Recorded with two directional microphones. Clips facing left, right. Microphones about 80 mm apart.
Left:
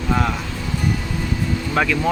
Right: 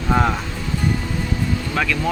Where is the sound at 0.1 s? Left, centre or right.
Right.